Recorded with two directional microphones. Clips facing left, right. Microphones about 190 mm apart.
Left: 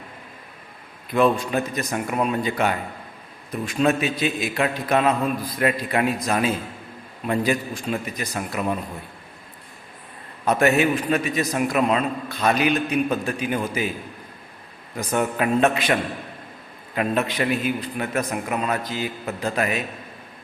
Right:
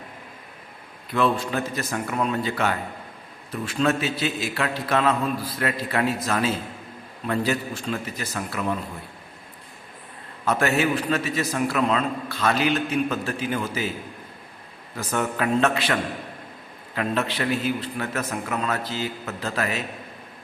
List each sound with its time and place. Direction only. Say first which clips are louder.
1.1 s a man's voice: left 3 dB; 15° left (ahead or behind)
10.4 s a man's voice: left 3 dB; 20° left (ahead or behind)
14.9 s a man's voice: left 3 dB; 15° left (ahead or behind)